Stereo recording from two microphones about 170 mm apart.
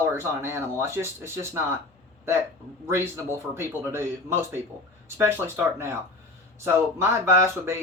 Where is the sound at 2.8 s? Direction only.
15° right (ahead or behind).